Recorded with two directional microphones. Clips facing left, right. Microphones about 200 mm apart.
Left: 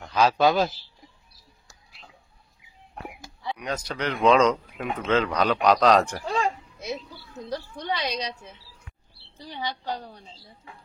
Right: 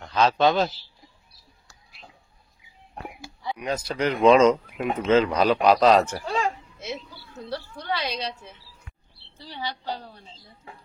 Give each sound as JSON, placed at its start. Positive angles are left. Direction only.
{"t": 0.0, "sound": "a man's voice", "side_deg": 10}
{"t": 3.4, "sound": "a woman's voice", "side_deg": -5}
{"t": 9.5, "sound": "a woman's voice", "side_deg": 20}